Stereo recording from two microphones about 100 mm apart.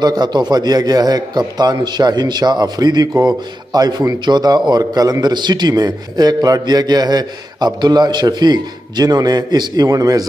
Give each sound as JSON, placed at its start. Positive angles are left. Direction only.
{"t": 0.0, "sound": "a man's voice", "side_deg": -45}